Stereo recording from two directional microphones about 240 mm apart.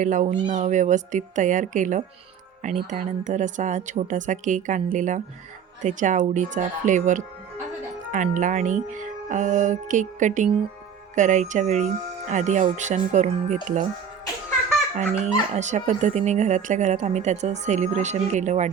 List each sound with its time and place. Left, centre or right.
0.0 s speech: right
15.2 s speech: right